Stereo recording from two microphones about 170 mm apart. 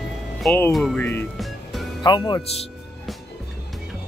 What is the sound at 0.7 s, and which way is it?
Speech, centre (ahead or behind).